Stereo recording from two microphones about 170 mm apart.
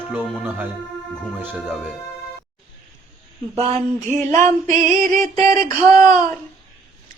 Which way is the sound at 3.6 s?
40° right (ahead or behind).